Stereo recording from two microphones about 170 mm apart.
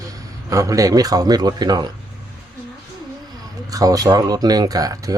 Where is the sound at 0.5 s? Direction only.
20° right (ahead or behind).